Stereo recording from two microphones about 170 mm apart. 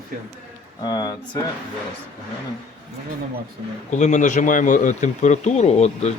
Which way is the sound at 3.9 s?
45° left (ahead or behind).